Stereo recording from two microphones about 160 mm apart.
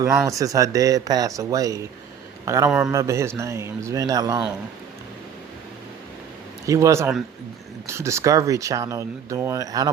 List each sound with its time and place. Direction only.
0.0 s a man's voice: 20° right (ahead or behind)
6.7 s speech: 20° right (ahead or behind)